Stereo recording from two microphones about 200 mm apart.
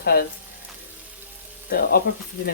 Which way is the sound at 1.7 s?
50° left (ahead or behind).